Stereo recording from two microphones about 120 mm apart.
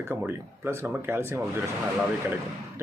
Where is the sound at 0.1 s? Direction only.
20° right (ahead or behind).